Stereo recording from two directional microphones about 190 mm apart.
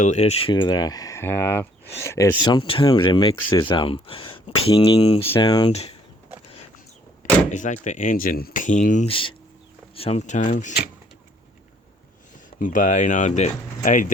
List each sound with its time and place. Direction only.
0.0 s speech: 35° left (ahead or behind)
7.5 s speech: 40° left (ahead or behind)
12.5 s speech: 45° left (ahead or behind)